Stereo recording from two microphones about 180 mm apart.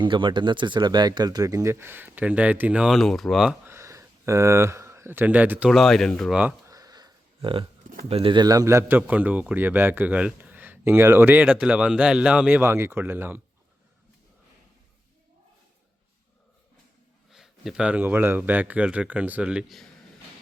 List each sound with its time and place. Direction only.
0.0 s a man's voice: 25° right (ahead or behind); by 3.5 s centre (ahead or behind)
3.7 s speech: 15° right (ahead or behind); by 6.4 s centre (ahead or behind)
6.4 s a sound: 20° right (ahead or behind)
8.0 s a man's voice: 30° right (ahead or behind); by 13.4 s 10° right (ahead or behind)
17.3 s a man's voice: centre (ahead or behind)